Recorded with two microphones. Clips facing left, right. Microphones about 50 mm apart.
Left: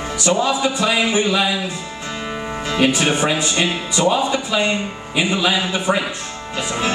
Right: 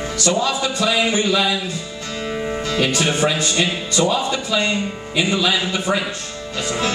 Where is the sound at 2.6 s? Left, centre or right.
Centre.